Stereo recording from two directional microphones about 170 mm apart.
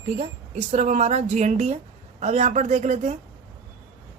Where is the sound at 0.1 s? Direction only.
40° right (ahead or behind).